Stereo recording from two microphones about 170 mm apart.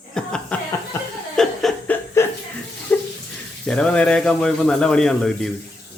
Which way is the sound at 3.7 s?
5° left (ahead or behind).